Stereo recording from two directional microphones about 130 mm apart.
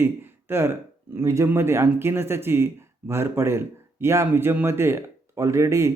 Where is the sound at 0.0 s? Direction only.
20° right (ahead or behind).